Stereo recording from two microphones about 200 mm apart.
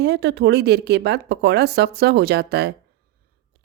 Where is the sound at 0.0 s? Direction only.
60° right (ahead or behind).